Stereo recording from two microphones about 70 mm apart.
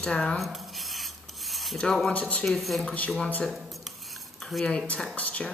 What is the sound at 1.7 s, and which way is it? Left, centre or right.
Speech, centre.